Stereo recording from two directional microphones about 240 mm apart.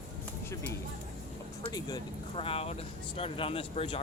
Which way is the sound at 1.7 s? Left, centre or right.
Centre.